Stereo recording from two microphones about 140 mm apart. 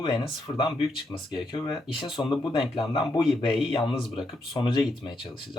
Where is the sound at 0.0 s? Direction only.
30° left (ahead or behind).